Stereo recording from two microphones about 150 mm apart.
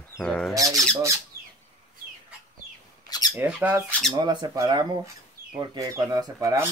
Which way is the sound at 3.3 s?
10° right (ahead or behind).